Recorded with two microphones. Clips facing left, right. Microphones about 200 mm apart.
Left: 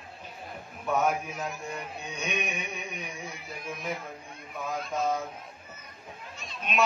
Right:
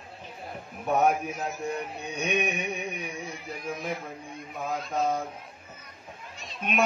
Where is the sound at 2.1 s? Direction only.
60° right (ahead or behind).